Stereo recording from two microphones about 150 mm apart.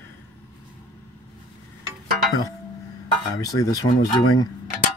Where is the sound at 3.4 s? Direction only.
25° left (ahead or behind).